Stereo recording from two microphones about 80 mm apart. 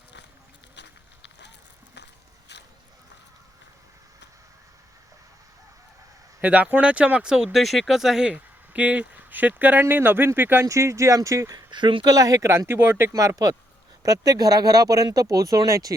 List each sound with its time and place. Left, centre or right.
6.4 s speech: centre
10.7 s speech: right
11.7 s speech: right
12.0 s speech: right
13.1 s speech: right